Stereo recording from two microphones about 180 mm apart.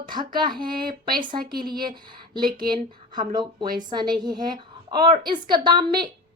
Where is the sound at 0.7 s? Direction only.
55° right (ahead or behind).